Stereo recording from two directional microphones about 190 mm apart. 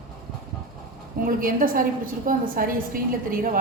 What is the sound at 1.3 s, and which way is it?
A woman's voice, 50° right (ahead or behind).